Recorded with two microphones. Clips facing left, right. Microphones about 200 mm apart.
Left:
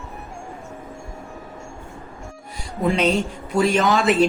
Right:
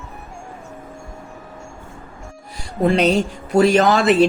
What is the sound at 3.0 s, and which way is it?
Speech, 35° right (ahead or behind).